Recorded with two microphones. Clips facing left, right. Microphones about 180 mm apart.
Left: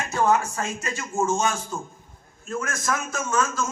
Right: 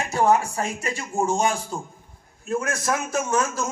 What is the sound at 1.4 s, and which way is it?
A man's voice, 35° right (ahead or behind).